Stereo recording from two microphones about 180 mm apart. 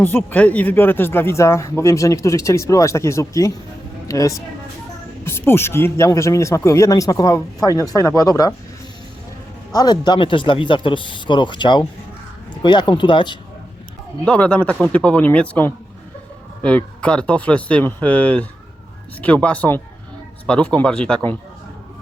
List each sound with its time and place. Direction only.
0.0 s speech: 10° left (ahead or behind)
9.7 s speech: 25° left (ahead or behind)
14.3 s speech: 5° left (ahead or behind)